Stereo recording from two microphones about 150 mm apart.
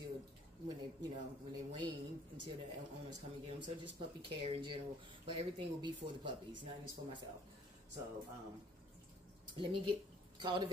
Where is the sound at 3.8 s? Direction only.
35° right (ahead or behind).